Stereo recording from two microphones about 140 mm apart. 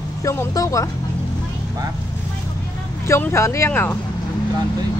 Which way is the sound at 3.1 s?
15° left (ahead or behind).